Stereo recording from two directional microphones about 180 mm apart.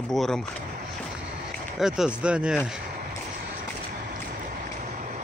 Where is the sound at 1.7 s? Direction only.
Centre (ahead or behind).